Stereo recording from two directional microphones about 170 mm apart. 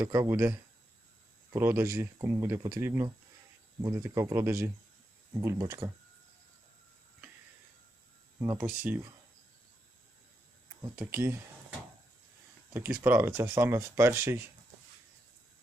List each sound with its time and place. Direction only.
0.0 s speech: 20° right (ahead or behind)
1.5 s speech: 15° right (ahead or behind)
8.4 s speech: 10° right (ahead or behind)
10.8 s speech: 10° right (ahead or behind)
12.7 s speech: 15° right (ahead or behind)